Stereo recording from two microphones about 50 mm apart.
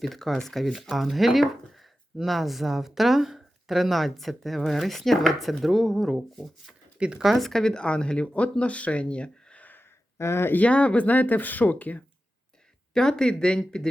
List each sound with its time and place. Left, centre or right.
0.0 s speech: centre
7.0 s speech: centre
7.3 s speech: centre; by 9.6 s left
10.2 s speech: left
10.5 s speech: left
12.9 s speech: centre